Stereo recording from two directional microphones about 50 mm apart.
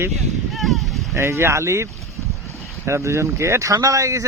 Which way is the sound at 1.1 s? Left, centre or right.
Right.